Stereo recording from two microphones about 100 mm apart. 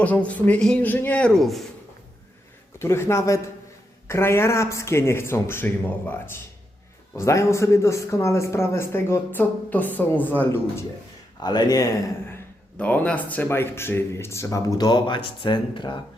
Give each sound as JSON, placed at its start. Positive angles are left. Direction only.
{"t": 0.0, "sound": "speech", "side_deg": 15}
{"t": 2.7, "sound": "a man's voice", "side_deg": 25}
{"t": 11.4, "sound": "speech", "side_deg": 45}
{"t": 12.3, "sound": "a man's voice", "side_deg": 15}